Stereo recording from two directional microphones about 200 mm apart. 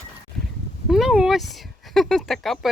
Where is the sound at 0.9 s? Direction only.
Centre (ahead or behind).